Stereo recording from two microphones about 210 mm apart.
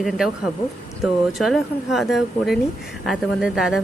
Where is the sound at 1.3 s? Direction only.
Centre (ahead or behind).